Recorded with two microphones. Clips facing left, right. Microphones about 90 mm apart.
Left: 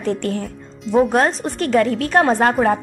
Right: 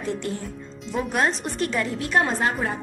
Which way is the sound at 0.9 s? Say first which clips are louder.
Left 8 dB; 40° left (ahead or behind).